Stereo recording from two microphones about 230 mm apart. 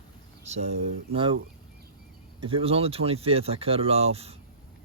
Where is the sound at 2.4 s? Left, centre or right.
Right.